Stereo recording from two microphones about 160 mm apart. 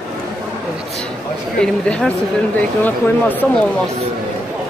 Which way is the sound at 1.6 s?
5° left (ahead or behind).